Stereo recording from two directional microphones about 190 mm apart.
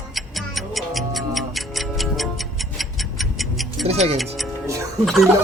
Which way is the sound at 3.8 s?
35° right (ahead or behind).